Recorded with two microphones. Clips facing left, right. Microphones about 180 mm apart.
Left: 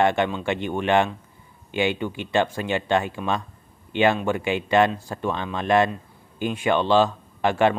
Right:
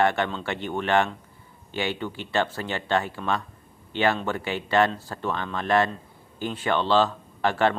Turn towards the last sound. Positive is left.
turn(degrees=15)  # may be behind; listen again after turning